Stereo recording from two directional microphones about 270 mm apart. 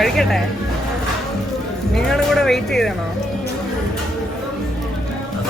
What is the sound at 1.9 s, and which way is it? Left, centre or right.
Speech, centre.